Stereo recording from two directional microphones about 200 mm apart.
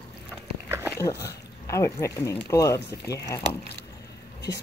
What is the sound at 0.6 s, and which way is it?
Dog, 15° right (ahead or behind).